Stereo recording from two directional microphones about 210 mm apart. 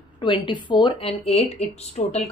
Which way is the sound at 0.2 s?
20° left (ahead or behind).